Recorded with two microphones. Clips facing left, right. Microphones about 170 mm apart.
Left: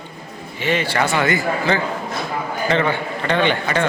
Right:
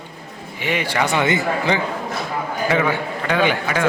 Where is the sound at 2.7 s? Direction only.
5° right (ahead or behind).